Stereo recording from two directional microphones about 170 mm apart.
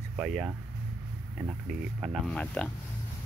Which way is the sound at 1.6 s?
Centre (ahead or behind).